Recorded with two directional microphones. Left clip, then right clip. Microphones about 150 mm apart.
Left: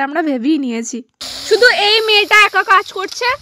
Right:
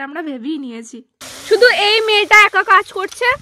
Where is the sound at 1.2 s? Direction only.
5° right (ahead or behind).